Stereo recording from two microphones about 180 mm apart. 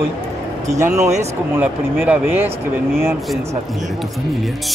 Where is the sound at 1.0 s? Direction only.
40° right (ahead or behind).